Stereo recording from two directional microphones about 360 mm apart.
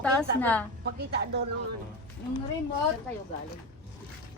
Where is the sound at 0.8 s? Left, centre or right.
Right.